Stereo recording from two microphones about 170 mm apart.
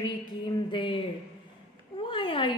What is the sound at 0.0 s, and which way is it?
A woman's voice, 25° left (ahead or behind).